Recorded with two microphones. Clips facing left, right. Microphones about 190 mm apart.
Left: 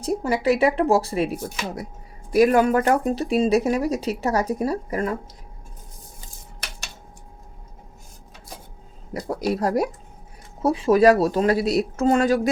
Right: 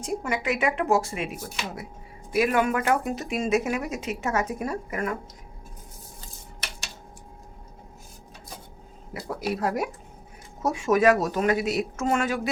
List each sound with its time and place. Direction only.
0.0 s speech: 35° left (ahead or behind)
9.6 s speech: 35° left (ahead or behind)